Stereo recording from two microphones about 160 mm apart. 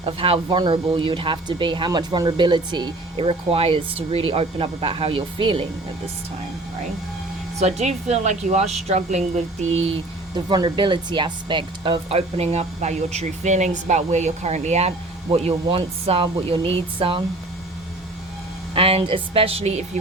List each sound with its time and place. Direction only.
0.0 s speech: 35° right (ahead or behind)
7.6 s speech: 45° right (ahead or behind)
10.3 s speech: 25° right (ahead or behind)
18.7 s speech: 35° right (ahead or behind)